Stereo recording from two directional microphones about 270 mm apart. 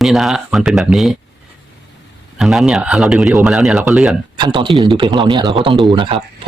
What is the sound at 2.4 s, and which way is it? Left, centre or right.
Speech, centre.